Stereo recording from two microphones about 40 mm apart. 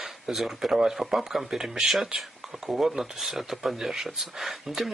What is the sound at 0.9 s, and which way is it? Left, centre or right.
Speech, centre.